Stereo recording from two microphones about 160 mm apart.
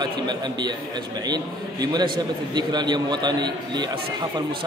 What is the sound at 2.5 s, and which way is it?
A man's voice, 25° right (ahead or behind).